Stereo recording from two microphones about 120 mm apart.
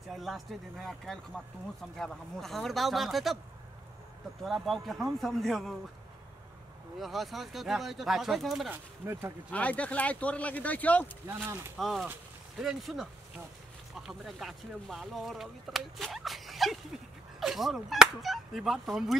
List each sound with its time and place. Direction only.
0.1 s speech: centre (ahead or behind)
4.4 s speech: centre (ahead or behind)
7.0 s speech: centre (ahead or behind)
8.6 s speech: 20° right (ahead or behind)
9.5 s speech: 10° left (ahead or behind)
11.2 s speech: 20° right (ahead or behind)
11.8 s speech: centre (ahead or behind)